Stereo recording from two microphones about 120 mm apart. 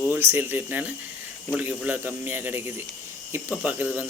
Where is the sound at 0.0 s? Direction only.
20° right (ahead or behind).